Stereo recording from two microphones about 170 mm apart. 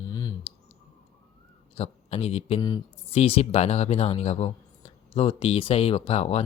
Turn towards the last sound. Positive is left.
turn(degrees=35)  # may be behind; listen again after turning